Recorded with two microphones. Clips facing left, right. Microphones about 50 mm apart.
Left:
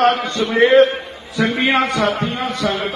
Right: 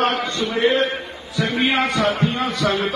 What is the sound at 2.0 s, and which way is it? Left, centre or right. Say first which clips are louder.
Speech: left 1 dB; left.